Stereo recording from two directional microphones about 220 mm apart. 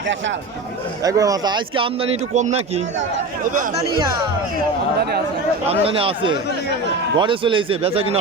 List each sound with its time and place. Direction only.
1.0 s speech: 15° right (ahead or behind); by 3.8 s 35° right (ahead or behind)
5.6 s speech: 25° right (ahead or behind)